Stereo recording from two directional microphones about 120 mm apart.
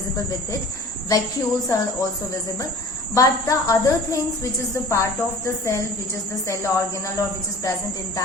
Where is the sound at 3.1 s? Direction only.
30° left (ahead or behind).